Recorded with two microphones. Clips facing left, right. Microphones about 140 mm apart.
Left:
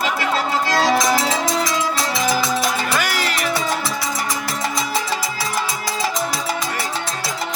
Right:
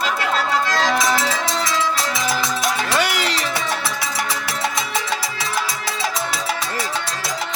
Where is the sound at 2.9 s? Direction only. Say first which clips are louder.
Right 1 dB; 20° right (ahead or behind).